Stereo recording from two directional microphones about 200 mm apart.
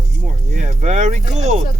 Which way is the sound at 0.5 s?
35° right (ahead or behind).